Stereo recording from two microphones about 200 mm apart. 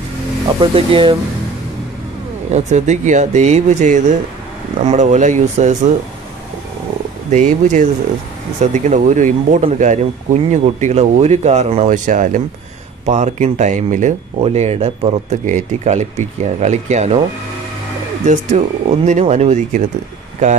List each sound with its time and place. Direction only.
0.6 s speech: 25° right (ahead or behind)
2.5 s speech: 35° right (ahead or behind)
7.2 s speech: 35° right (ahead or behind)
18.2 s speech: 35° right (ahead or behind)